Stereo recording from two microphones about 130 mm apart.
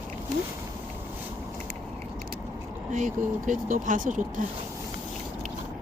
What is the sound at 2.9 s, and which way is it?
Speech, 80° right.